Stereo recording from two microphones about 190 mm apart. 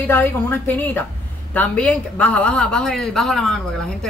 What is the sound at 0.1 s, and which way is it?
A woman's voice, 10° left (ahead or behind).